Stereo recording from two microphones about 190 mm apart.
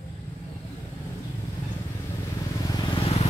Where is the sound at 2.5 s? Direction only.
20° left (ahead or behind).